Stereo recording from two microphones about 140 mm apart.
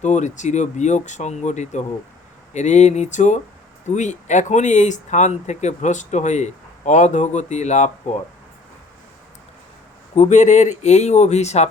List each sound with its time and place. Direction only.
0.0 s speech: 60° left (ahead or behind)
10.2 s speech: 60° left (ahead or behind)